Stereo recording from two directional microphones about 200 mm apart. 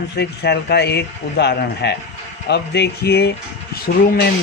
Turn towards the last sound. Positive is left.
turn(degrees=50)  # may be behind; listen again after turning